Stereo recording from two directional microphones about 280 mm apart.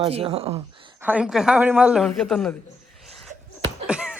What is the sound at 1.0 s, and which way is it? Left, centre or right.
A man's voice, centre.